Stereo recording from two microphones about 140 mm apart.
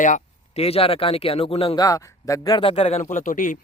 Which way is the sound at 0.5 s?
45° left (ahead or behind).